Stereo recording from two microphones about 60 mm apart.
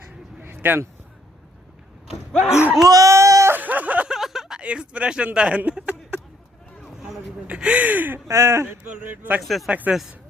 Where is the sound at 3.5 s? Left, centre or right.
Right.